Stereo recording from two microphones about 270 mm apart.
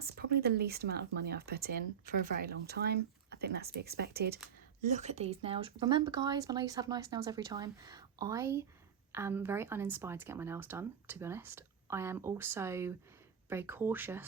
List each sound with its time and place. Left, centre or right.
0.0 s speech: right
4.9 s speech: right; by 14.3 s centre